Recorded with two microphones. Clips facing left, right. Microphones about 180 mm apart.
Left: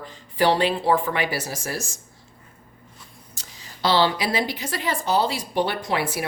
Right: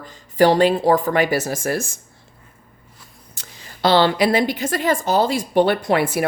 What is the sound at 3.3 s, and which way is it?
Speech, 55° right (ahead or behind).